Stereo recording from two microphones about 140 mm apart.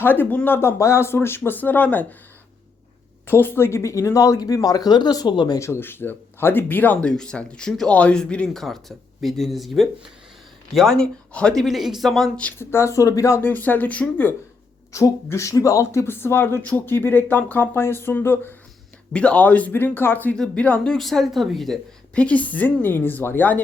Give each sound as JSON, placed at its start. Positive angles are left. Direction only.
{"t": 0.0, "sound": "speech", "side_deg": 15}
{"t": 3.2, "sound": "speech", "side_deg": 15}
{"t": 14.9, "sound": "speech", "side_deg": 20}